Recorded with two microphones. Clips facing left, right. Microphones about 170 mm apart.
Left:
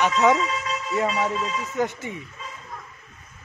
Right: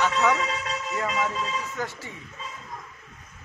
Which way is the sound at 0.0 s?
20° left (ahead or behind).